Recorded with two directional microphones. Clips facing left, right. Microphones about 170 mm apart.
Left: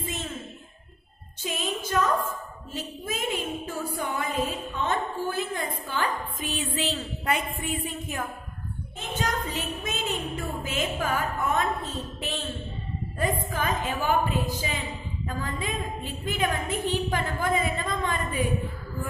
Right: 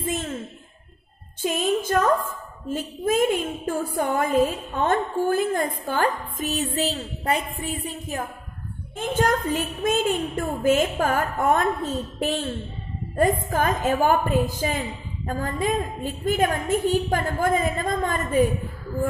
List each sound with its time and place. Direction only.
0.0 s a sound: 50° right (ahead or behind)
1.4 s a woman's voice: 50° right (ahead or behind)
8.9 s a woman's voice: 50° right (ahead or behind)